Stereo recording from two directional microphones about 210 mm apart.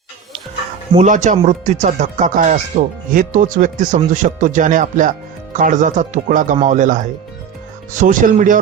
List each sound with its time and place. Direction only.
0.9 s speech: 35° right (ahead or behind)